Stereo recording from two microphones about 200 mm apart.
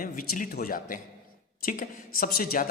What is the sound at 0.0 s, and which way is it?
A man's voice, 45° left (ahead or behind).